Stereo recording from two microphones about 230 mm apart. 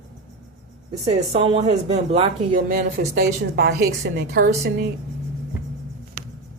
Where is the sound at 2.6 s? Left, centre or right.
Right.